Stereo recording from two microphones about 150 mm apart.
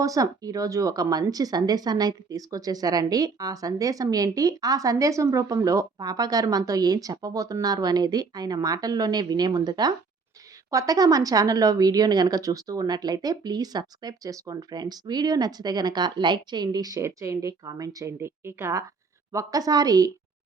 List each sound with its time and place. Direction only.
0.0 s speech: 25° right (ahead or behind)